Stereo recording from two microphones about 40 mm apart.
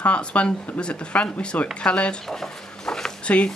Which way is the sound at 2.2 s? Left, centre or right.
Centre.